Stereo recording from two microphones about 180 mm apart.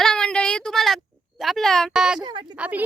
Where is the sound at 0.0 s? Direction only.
5° left (ahead or behind).